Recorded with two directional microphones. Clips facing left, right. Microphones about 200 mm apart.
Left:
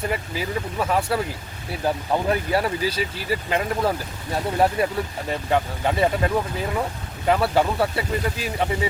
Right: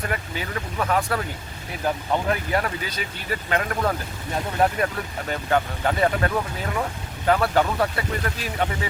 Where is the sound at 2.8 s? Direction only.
30° left (ahead or behind).